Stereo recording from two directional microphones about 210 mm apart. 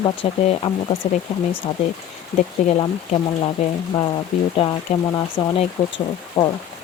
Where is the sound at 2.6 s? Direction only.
35° left (ahead or behind).